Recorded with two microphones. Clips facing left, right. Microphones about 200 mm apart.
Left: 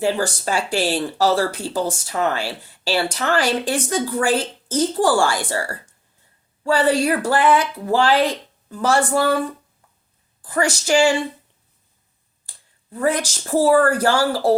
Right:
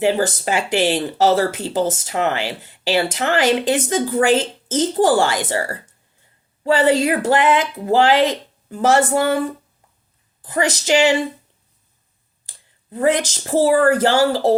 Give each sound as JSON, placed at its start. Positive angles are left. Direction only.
{"t": 0.0, "sound": "speech", "side_deg": -20}
{"t": 10.4, "sound": "speech", "side_deg": -20}
{"t": 12.9, "sound": "speech", "side_deg": -20}